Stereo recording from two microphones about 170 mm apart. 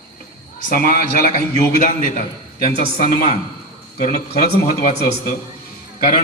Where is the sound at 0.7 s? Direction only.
55° left (ahead or behind).